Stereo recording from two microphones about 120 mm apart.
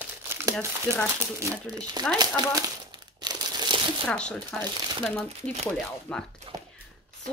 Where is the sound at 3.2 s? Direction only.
40° right (ahead or behind).